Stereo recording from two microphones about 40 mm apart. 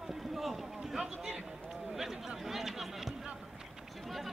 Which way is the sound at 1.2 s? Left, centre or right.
Centre.